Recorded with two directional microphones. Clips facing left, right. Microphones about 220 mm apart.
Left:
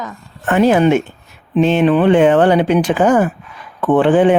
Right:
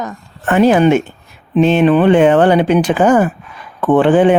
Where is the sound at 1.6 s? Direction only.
90° right.